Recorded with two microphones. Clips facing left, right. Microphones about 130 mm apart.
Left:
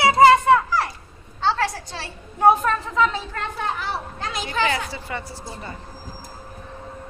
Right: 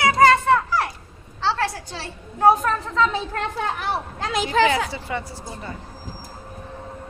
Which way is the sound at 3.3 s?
65° right (ahead or behind).